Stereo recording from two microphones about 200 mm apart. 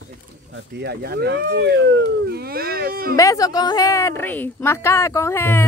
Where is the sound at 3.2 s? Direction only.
15° left (ahead or behind).